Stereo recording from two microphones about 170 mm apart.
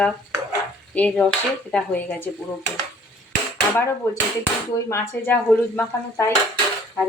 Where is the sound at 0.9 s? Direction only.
5° left (ahead or behind).